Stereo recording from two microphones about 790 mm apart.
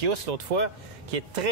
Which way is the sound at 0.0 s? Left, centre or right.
Right.